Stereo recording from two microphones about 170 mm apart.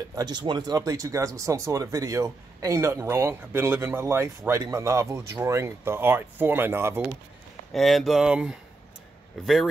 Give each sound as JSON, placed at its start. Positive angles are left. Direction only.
{"t": 0.1, "sound": "speech", "side_deg": -25}
{"t": 7.7, "sound": "speech", "side_deg": 0}